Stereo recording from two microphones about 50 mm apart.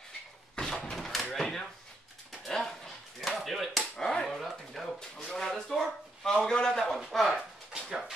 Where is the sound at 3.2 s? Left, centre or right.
Centre.